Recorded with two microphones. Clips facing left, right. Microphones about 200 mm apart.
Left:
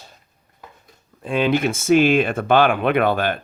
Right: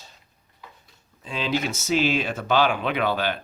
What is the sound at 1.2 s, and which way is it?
Speech, 55° left (ahead or behind).